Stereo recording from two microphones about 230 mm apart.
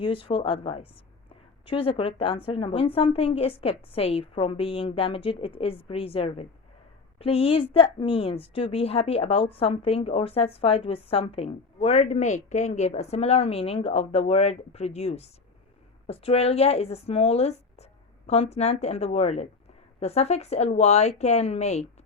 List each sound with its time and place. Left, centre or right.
0.0 s a woman's voice: left